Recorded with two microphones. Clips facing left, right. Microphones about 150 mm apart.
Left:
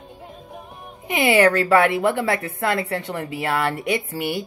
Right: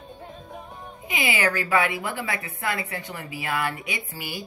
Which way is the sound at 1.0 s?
60° left (ahead or behind).